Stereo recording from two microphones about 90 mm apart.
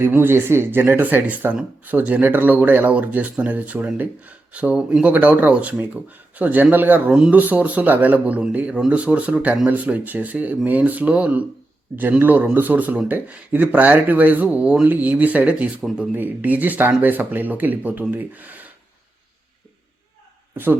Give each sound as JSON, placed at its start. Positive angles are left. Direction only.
{"t": 0.0, "sound": "speech", "side_deg": -25}